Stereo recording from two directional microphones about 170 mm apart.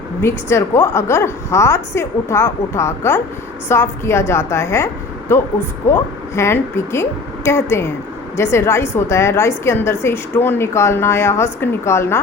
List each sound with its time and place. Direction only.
0.2 s a woman's voice: 15° left (ahead or behind)